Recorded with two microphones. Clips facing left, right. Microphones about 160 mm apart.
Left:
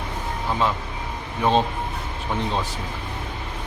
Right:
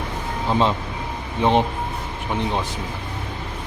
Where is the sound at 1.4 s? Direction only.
20° right (ahead or behind).